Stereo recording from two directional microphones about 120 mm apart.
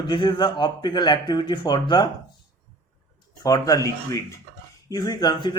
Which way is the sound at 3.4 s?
30° left (ahead or behind).